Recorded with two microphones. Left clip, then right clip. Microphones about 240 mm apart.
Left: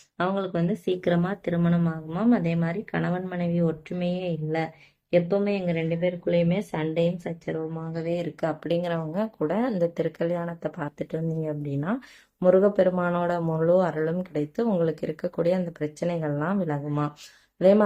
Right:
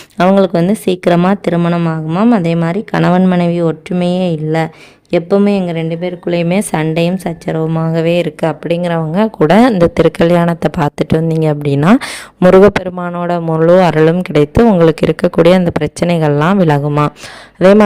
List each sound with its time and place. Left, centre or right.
0.2 s a woman's voice: right